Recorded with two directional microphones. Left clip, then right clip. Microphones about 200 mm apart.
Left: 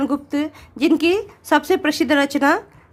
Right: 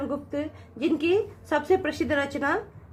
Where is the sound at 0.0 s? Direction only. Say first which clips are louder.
Left 8 dB; 50° left (ahead or behind).